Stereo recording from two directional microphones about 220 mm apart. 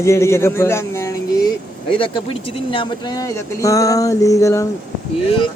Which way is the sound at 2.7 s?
20° left (ahead or behind).